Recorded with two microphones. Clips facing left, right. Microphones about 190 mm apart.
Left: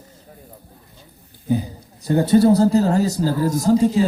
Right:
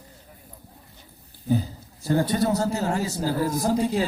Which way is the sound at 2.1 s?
25° left (ahead or behind).